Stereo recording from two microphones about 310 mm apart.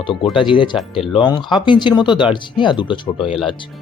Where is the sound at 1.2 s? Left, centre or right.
Centre.